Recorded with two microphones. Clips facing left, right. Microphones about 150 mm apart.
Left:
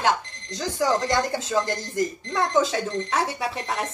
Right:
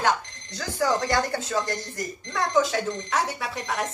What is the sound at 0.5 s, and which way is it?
Speech, 20° left (ahead or behind).